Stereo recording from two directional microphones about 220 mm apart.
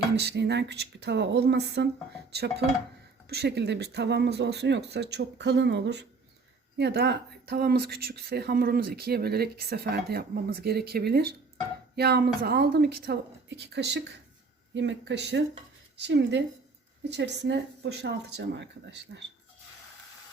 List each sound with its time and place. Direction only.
0.2 s a woman's voice: 50° right (ahead or behind)